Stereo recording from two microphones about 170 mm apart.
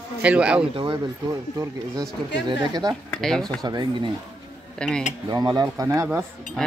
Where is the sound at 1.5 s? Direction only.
20° right (ahead or behind).